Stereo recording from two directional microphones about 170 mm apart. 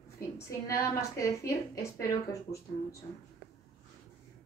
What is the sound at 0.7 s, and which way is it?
A woman's voice, 20° left (ahead or behind).